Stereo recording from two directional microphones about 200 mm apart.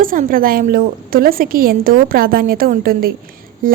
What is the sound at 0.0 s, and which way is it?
A woman's voice, 45° right (ahead or behind).